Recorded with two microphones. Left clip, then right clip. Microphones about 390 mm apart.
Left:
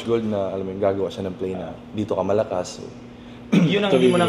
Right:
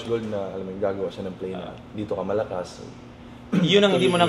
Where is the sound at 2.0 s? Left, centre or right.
Left.